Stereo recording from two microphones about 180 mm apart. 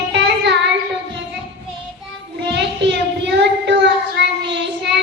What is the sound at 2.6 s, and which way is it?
Child singing, 75° right (ahead or behind).